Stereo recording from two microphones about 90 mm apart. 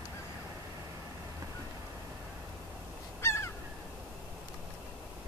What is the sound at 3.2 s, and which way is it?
Crow, 30° left (ahead or behind).